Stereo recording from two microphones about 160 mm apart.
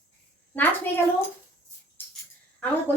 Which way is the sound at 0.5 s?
10° left (ahead or behind).